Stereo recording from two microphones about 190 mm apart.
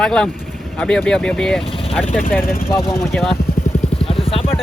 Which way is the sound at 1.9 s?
10° left (ahead or behind).